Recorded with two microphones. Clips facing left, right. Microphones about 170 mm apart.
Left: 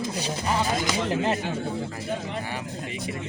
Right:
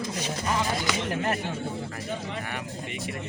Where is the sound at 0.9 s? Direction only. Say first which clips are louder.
Left 3 dB; 20° left (ahead or behind).